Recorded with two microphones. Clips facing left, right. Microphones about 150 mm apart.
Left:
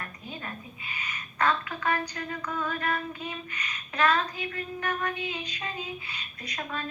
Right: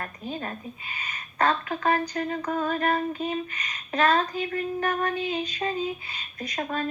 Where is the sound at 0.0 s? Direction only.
35° right (ahead or behind).